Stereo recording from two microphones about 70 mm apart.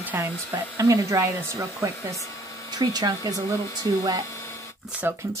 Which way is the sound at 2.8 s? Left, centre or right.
Right.